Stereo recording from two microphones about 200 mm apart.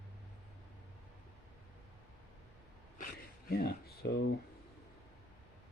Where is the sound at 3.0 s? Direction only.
45° left (ahead or behind).